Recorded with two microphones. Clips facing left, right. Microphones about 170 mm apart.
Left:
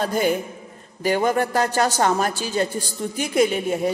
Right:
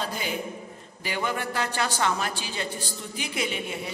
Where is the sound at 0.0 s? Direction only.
50° left (ahead or behind).